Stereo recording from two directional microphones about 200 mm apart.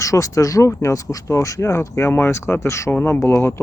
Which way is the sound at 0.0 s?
15° left (ahead or behind).